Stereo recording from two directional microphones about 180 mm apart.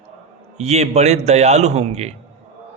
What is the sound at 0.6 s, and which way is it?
A man's voice, 40° right (ahead or behind).